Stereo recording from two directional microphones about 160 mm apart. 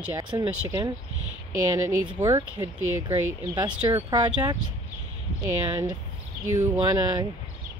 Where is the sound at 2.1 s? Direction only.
25° right (ahead or behind).